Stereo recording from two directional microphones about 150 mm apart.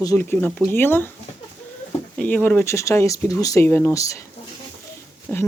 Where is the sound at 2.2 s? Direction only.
10° left (ahead or behind).